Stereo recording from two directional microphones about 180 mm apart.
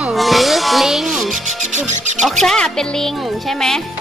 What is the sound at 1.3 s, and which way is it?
Speech, 40° right (ahead or behind).